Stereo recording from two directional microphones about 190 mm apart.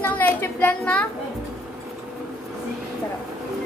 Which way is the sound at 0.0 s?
10° left (ahead or behind).